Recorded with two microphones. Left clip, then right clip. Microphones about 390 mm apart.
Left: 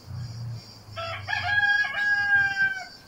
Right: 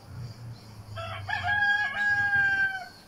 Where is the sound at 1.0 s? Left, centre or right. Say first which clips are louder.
Left 3 dB; right.